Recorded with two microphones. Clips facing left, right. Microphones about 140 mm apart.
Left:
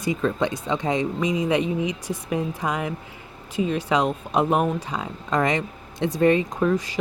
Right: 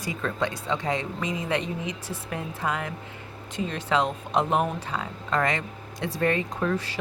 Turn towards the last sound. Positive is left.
turn(degrees=15)  # may be behind; listen again after turning